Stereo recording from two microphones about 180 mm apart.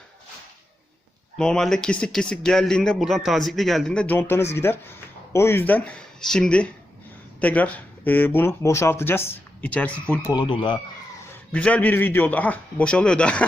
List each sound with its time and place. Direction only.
1.4 s speech: 5° left (ahead or behind)
10.3 s speech: 25° left (ahead or behind)
11.5 s speech: 5° left (ahead or behind)